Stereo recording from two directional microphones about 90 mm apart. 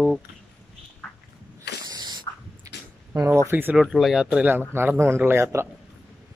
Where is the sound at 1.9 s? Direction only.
45° right (ahead or behind).